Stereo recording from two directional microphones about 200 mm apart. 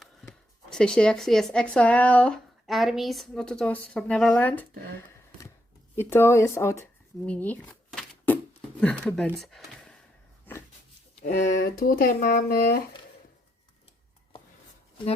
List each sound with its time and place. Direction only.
0.0 s speech: centre (ahead or behind)
6.0 s speech: 10° left (ahead or behind)
7.3 s a sound: 10° left (ahead or behind)
8.8 s speech: 5° left (ahead or behind)
11.1 s a sound: 40° left (ahead or behind)
11.3 s speech: 60° left (ahead or behind)